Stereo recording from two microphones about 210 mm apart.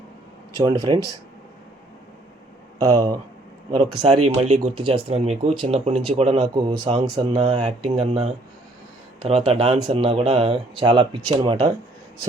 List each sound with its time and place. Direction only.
0.6 s speech: 15° right (ahead or behind)
2.7 s speech: 15° right (ahead or behind)
4.4 s speech: 30° right (ahead or behind)
7.5 s speech: 30° right (ahead or behind)